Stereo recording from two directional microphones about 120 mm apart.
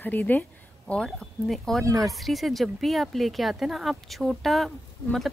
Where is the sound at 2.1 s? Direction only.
Centre (ahead or behind).